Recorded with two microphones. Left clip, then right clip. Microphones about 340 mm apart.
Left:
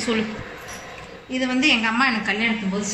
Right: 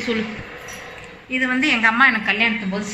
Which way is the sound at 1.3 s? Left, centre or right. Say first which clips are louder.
Right 1 dB; centre.